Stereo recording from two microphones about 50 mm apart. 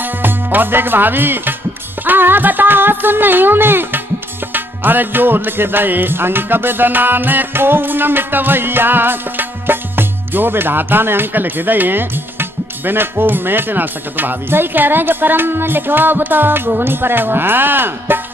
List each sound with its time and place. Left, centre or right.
0.0 s speech: right
2.0 s music: right